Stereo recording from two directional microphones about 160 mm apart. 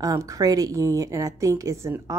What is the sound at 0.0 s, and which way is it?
Speech, 20° right (ahead or behind).